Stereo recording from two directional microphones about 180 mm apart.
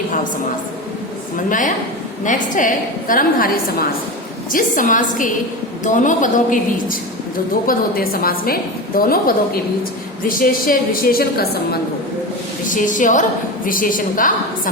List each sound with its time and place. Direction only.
1.5 s a woman's voice: 45° left (ahead or behind)
12.6 s a woman's voice: 45° left (ahead or behind)